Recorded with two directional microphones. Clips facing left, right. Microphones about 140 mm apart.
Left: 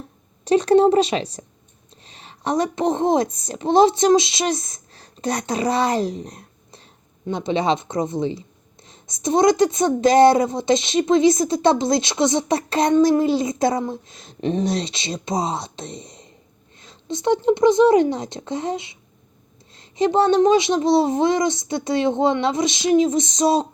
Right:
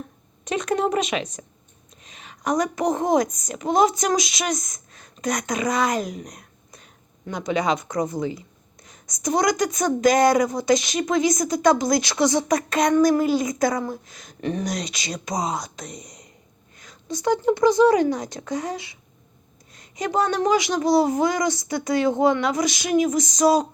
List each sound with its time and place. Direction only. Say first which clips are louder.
0.4 s a woman's voice: left 9 dB; 30° left (ahead or behind)